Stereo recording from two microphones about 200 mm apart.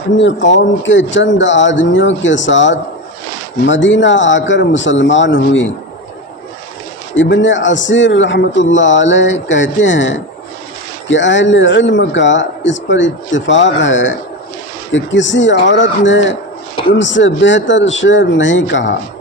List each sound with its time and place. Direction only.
0.2 s speech: 65° left (ahead or behind)
7.2 s speech: 65° left (ahead or behind)